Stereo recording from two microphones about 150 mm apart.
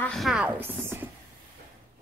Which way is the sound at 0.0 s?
Centre (ahead or behind).